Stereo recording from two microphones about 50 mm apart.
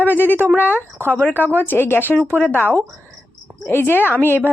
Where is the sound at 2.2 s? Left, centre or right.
Left.